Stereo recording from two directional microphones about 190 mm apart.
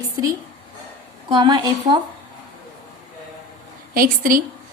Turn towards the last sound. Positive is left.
turn(degrees=-45)  # may be behind; listen again after turning